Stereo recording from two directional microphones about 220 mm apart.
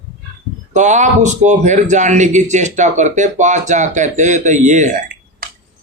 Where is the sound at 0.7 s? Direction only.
35° right (ahead or behind).